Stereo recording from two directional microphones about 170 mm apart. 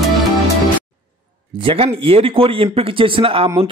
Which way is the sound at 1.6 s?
35° right (ahead or behind).